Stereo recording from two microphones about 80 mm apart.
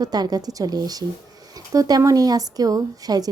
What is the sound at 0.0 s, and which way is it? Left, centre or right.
Speech, right.